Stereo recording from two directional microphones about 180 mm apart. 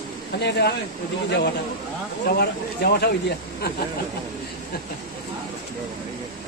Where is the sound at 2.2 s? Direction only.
60° left (ahead or behind).